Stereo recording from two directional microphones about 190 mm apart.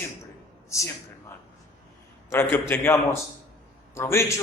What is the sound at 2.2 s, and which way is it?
Speech, 10° left (ahead or behind).